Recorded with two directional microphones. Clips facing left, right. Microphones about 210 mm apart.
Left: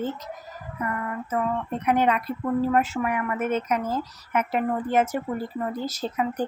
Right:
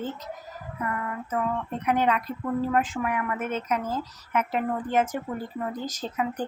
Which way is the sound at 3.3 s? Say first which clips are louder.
Left 5 dB; 50° left (ahead or behind).